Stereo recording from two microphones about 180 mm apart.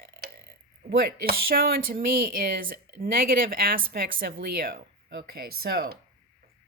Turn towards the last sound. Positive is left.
turn(degrees=-55)  # may be behind; listen again after turning